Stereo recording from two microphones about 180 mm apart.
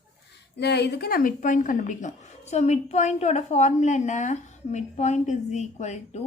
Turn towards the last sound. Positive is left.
turn(degrees=40)  # may be behind; listen again after turning